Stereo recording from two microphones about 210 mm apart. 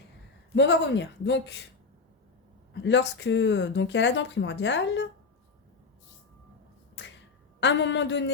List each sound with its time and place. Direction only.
0.5 s speech: 55° left (ahead or behind)
2.7 s speech: 60° left (ahead or behind)
7.0 s finger snapping: 55° left (ahead or behind)
7.6 s speech: 60° left (ahead or behind)